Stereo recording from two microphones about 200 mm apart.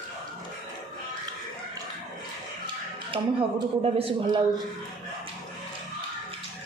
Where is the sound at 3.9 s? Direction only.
25° right (ahead or behind).